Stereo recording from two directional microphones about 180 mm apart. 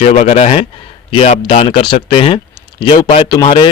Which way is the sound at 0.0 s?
35° left (ahead or behind).